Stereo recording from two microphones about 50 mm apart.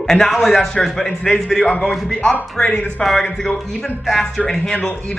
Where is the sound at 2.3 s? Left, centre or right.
Left.